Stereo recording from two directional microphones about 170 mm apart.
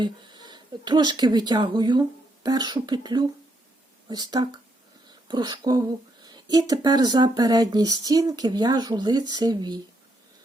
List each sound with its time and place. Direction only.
0.0 s speech: 25° right (ahead or behind)